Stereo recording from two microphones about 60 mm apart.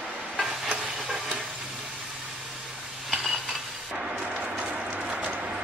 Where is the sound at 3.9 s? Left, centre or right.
Centre.